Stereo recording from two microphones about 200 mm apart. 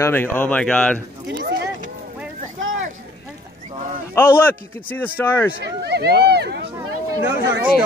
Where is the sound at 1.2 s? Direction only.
55° right (ahead or behind).